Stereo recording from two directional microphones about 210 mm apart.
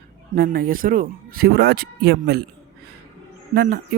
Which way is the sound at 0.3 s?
45° right (ahead or behind).